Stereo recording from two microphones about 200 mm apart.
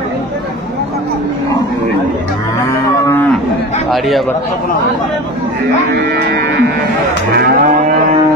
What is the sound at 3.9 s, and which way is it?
Speech, centre (ahead or behind).